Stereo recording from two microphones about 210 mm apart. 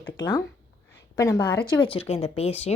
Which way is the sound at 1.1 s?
15° left (ahead or behind).